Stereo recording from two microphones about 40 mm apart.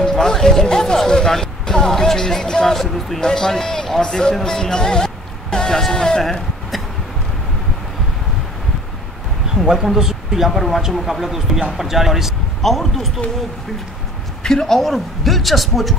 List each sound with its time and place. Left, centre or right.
0.0 s music: centre
3.2 s speech: centre
9.5 s a man's voice: centre
14.4 s a woman's voice: centre
14.9 s a man's voice: centre